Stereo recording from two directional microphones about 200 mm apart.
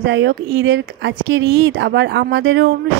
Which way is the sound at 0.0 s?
65° right (ahead or behind).